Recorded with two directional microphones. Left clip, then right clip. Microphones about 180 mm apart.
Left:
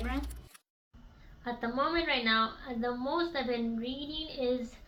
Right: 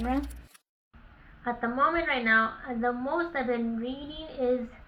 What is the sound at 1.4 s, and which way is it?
A woman's voice, 40° left (ahead or behind).